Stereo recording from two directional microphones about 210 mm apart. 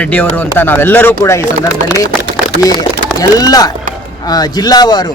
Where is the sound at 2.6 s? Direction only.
15° left (ahead or behind).